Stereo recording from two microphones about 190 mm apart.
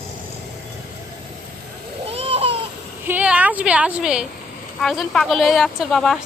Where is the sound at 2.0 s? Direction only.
30° right (ahead or behind).